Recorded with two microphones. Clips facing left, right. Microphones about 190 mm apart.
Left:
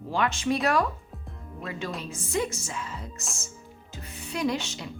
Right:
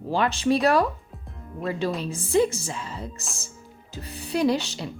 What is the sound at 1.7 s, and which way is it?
Speech, 35° right (ahead or behind).